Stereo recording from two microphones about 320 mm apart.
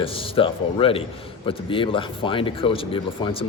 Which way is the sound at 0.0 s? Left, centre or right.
Centre.